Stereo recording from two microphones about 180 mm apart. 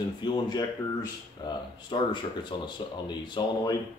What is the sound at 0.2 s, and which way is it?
Speech, 25° left (ahead or behind).